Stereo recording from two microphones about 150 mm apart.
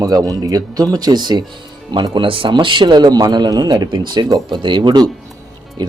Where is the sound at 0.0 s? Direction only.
25° right (ahead or behind).